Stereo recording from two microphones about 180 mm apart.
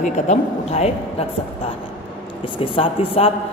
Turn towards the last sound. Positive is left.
turn(degrees=30)  # may be behind; listen again after turning